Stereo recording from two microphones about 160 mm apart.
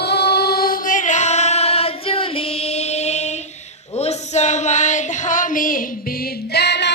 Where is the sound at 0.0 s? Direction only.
90° left; by 3.4 s 45° left (ahead or behind).